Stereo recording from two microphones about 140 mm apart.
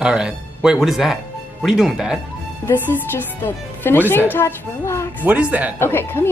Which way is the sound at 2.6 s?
15° left (ahead or behind).